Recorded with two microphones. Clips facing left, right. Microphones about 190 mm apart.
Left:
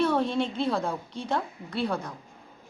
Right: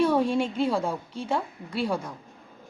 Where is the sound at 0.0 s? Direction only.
10° right (ahead or behind).